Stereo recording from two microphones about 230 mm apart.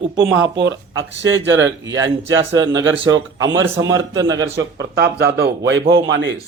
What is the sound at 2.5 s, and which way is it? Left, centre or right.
A man's voice, centre.